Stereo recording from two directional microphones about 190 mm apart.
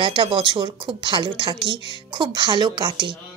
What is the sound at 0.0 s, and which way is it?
A woman's voice, 25° right (ahead or behind).